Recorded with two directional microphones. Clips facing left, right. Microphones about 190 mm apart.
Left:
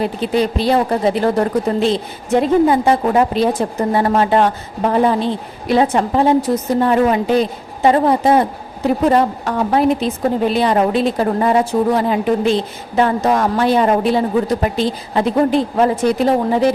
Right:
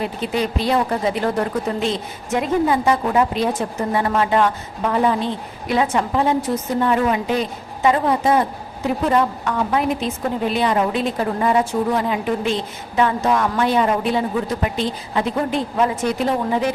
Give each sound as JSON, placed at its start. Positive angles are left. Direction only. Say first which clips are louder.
{"t": 0.0, "sound": "a woman's voice", "louder": "left 5 dB", "side_deg": 35}